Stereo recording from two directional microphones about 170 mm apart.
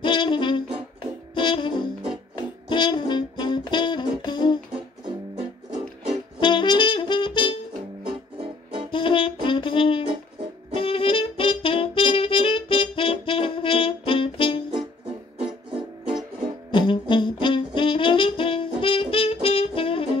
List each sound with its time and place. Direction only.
0.0 s brass instrument: 30° left (ahead or behind)
1.3 s music: 30° left (ahead or behind)
2.7 s brass instrument: 30° left (ahead or behind)
5.3 s music: 35° right (ahead or behind)
6.4 s brass instrument: 25° left (ahead or behind)
8.1 s music: 30° right (ahead or behind)
8.9 s brass instrument: 30° left (ahead or behind)
10.8 s saxophone: 35° left (ahead or behind)
14.7 s music: 35° right (ahead or behind)
16.7 s music: 30° left (ahead or behind)
17.1 s saxophone: 30° left (ahead or behind)